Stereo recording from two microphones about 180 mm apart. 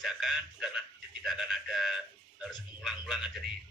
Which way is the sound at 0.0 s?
Centre (ahead or behind).